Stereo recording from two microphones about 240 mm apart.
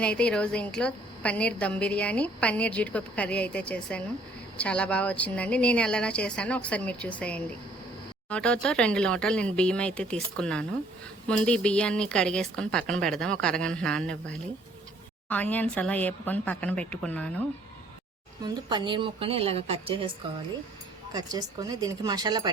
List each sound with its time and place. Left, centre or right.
0.0 s a woman's voice: centre
18.4 s a woman's voice: centre
21.1 s speech: centre